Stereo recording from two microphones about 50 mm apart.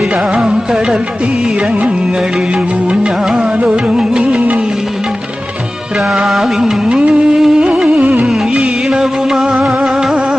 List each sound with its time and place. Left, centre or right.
0.3 s music: centre
2.9 s music: centre
6.2 s music: centre
7.9 s music: right
8.2 s music: centre